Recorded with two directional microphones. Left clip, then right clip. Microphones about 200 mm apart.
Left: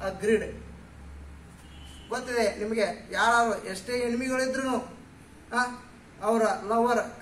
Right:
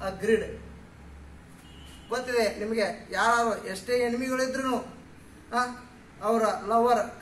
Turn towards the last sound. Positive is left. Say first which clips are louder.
# right 2 dB
turn(degrees=10)  # may be behind; listen again after turning